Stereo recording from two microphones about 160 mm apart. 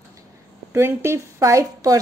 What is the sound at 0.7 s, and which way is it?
A woman's voice, 15° right (ahead or behind).